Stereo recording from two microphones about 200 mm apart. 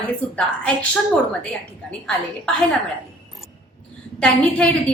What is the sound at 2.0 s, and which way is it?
Speech, centre (ahead or behind).